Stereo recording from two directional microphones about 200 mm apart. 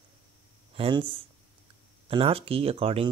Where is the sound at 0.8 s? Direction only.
25° right (ahead or behind).